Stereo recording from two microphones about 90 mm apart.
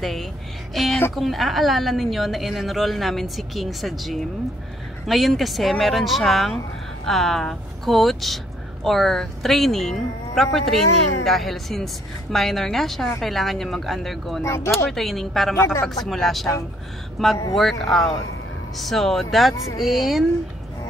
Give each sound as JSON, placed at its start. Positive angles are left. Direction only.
{"t": 0.0, "sound": "a woman's voice", "side_deg": 0}
{"t": 14.4, "sound": "speech", "side_deg": 30}
{"t": 14.9, "sound": "a woman's voice", "side_deg": 0}
{"t": 15.5, "sound": "speech", "side_deg": 30}
{"t": 15.8, "sound": "a woman's voice", "side_deg": 5}